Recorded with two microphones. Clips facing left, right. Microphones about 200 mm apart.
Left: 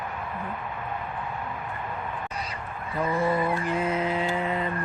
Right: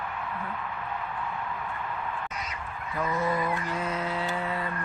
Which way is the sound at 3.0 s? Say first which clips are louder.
Left 3 dB; 30° left (ahead or behind).